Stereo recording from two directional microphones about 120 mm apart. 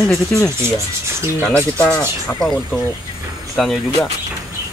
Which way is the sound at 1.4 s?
10° left (ahead or behind).